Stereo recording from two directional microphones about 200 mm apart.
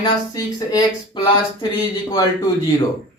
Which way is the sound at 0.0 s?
20° left (ahead or behind).